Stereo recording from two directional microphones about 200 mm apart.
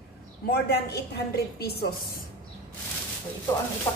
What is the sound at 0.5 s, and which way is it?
A woman's voice, 55° left (ahead or behind).